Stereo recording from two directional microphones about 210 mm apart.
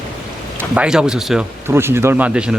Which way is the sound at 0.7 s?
5° right (ahead or behind).